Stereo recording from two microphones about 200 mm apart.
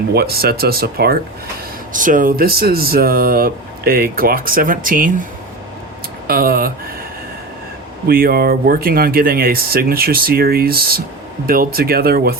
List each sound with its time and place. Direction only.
0.1 s speech: 50° right (ahead or behind)
6.2 s speech: 50° right (ahead or behind)
8.0 s speech: 50° right (ahead or behind)